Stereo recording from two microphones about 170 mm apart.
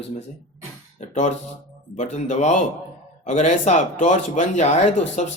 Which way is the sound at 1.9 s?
40° left (ahead or behind).